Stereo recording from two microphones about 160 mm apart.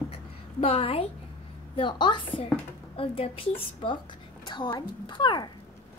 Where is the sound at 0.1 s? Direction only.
35° left (ahead or behind).